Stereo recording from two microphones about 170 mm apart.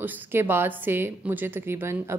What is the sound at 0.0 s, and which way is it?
A woman's voice, 10° right (ahead or behind).